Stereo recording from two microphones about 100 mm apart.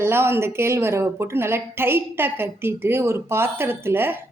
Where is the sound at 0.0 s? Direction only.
25° right (ahead or behind).